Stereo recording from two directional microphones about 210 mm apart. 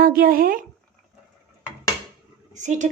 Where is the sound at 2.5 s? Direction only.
35° right (ahead or behind).